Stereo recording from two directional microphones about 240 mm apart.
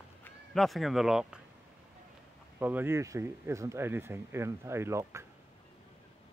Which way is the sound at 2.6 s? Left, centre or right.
Centre.